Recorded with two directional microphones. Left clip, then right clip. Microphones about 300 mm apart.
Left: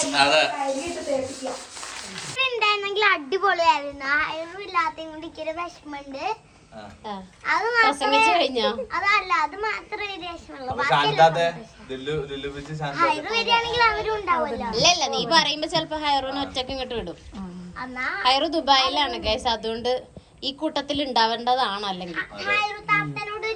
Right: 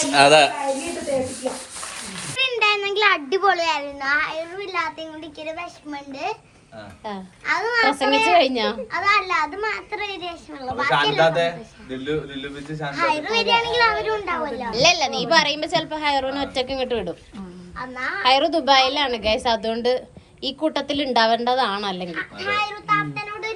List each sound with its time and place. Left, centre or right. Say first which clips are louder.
0.1 s a child's voice: right 6 dB; centre
2.3 s a child's voice: right 2 dB; centre
11.2 s a man's voice: left 1 dB; left
12.9 s a woman's voice: right 1 dB; centre